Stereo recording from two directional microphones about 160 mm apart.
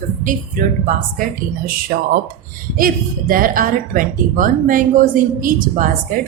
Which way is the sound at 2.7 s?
60° right (ahead or behind).